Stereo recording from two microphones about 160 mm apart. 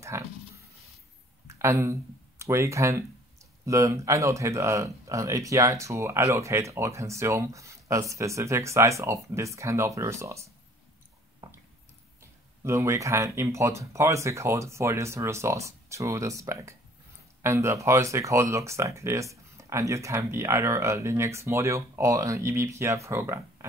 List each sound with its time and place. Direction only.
0.1 s speech: 15° right (ahead or behind)
1.5 s speech: 20° right (ahead or behind)
11.4 s a sound: 25° right (ahead or behind)
12.2 s speech: 20° right (ahead or behind)